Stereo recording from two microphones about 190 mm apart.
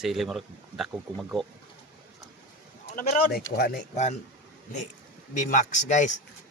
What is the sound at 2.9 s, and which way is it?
Speech, 50° left (ahead or behind).